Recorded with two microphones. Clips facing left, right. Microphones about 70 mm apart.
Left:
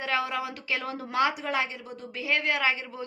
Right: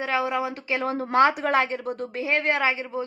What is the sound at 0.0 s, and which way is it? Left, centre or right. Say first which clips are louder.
A woman's voice: right 4 dB; right.